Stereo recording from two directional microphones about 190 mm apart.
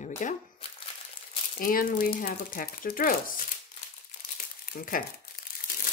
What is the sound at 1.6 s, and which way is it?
Speech, 50° left (ahead or behind).